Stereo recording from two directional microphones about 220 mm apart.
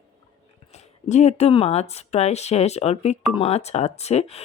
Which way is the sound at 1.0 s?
30° left (ahead or behind).